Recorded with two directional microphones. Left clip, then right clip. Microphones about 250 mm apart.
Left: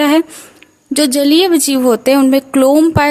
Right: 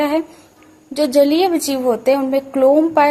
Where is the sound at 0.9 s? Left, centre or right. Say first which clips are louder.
Even; left.